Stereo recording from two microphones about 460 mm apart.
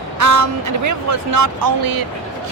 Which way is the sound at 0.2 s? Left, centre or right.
Right.